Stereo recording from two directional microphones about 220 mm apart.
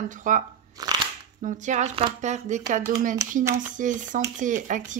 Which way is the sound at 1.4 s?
35° right (ahead or behind).